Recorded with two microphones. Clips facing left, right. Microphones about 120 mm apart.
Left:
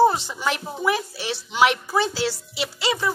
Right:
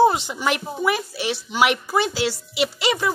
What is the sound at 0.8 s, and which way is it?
A woman's voice, 5° right (ahead or behind).